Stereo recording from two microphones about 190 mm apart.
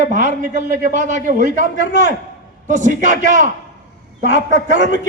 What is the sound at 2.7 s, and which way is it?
A man's voice, 40° right (ahead or behind).